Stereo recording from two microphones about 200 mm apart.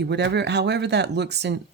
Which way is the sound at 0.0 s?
60° right (ahead or behind).